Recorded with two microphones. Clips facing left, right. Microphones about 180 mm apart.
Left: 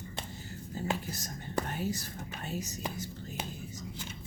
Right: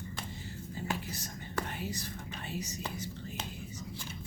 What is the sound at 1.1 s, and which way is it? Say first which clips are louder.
Speech: left 1 dB; 40° left (ahead or behind).